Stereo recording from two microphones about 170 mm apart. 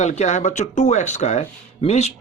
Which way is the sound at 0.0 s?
45° left (ahead or behind).